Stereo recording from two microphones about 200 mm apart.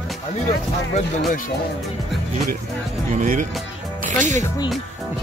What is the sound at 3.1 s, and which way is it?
Speech, 40° right (ahead or behind).